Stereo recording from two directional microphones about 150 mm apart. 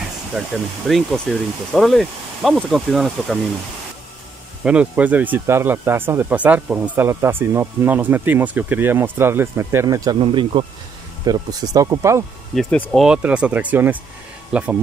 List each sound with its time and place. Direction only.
0.3 s speech: centre (ahead or behind)
4.6 s speech: 10° right (ahead or behind)
10.2 s speech: 35° right (ahead or behind)
11.2 s speech: 25° right (ahead or behind)
12.7 s speech: 10° left (ahead or behind)
13.0 s speech: 5° right (ahead or behind)